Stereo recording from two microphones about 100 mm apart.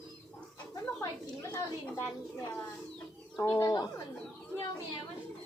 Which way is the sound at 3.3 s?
35° left (ahead or behind).